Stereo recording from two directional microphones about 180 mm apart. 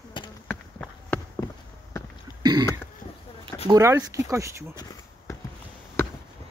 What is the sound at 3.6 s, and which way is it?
Speech, 15° right (ahead or behind).